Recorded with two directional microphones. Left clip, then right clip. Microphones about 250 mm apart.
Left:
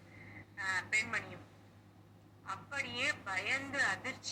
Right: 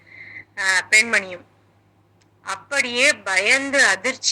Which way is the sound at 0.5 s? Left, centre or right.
Right.